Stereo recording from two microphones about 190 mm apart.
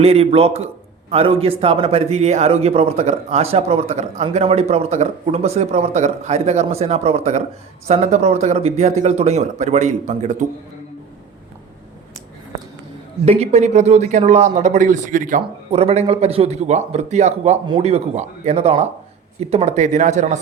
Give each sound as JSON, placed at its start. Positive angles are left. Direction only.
{"t": 0.0, "sound": "speech", "side_deg": -30}
{"t": 13.2, "sound": "speech", "side_deg": -35}